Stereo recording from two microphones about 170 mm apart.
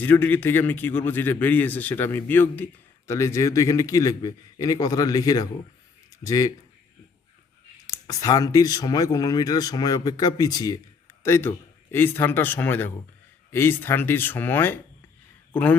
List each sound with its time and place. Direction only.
0.0 s a man's voice: 10° left (ahead or behind)
7.9 s a man's voice: 20° left (ahead or behind)